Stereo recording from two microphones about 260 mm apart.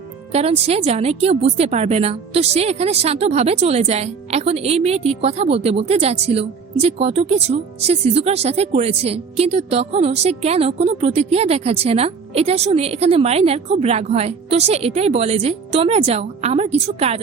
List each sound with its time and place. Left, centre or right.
0.3 s a woman's voice: right